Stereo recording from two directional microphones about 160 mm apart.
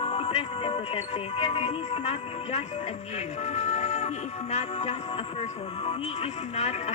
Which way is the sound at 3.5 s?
45° left (ahead or behind).